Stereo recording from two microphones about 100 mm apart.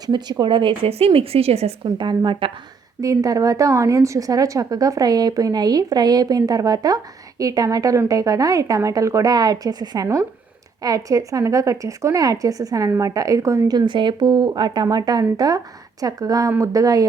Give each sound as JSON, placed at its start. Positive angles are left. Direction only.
{"t": 0.0, "sound": "a woman's voice", "side_deg": -45}
{"t": 2.0, "sound": "a woman's voice", "side_deg": -55}
{"t": 3.0, "sound": "a woman's voice", "side_deg": -35}